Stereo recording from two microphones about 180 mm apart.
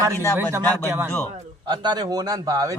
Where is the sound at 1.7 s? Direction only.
25° right (ahead or behind).